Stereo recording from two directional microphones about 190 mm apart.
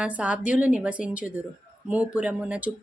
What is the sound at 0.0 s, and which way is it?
Speech, 5° right (ahead or behind).